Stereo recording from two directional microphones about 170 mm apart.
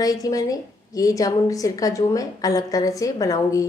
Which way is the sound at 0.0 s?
20° left (ahead or behind).